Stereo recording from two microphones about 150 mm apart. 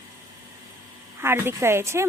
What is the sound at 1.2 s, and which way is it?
Speech, 15° right (ahead or behind).